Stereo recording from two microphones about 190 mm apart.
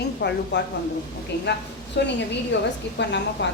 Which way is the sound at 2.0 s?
60° left (ahead or behind).